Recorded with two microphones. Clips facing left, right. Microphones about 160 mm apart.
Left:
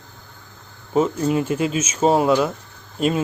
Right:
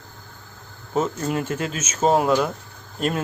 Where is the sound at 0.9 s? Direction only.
10° left (ahead or behind).